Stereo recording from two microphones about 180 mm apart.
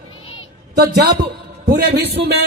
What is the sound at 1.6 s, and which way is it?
Speech, 65° right (ahead or behind).